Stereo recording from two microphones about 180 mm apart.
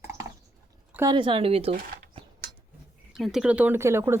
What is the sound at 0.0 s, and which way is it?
Biting, 15° right (ahead or behind).